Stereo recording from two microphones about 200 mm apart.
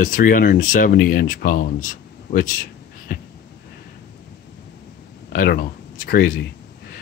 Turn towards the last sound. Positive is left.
turn(degrees=45)  # may be behind; listen again after turning